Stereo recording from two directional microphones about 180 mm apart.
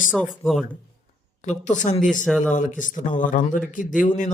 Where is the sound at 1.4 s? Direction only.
40° left (ahead or behind).